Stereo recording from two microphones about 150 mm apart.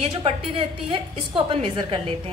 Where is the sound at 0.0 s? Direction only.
35° right (ahead or behind).